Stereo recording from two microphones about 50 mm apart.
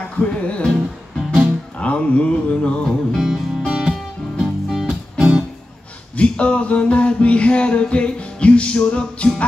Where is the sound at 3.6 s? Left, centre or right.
Centre.